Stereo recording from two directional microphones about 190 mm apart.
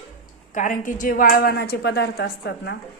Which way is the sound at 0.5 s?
40° left (ahead or behind).